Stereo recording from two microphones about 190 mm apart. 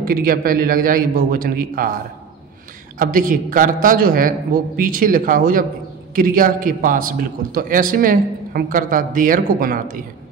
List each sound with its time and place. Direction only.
0.0 s a man's voice: 50° right (ahead or behind)
3.0 s a man's voice: 45° right (ahead or behind)